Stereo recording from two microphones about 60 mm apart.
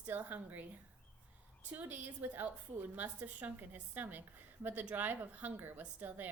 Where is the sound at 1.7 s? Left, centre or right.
Right.